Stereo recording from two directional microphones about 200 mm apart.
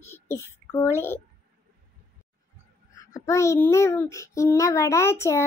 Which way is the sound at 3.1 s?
15° left (ahead or behind).